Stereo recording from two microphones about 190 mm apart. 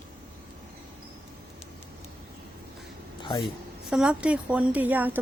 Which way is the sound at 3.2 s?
25° left (ahead or behind).